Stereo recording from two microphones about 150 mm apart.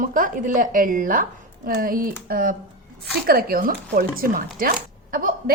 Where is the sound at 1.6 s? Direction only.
75° right (ahead or behind).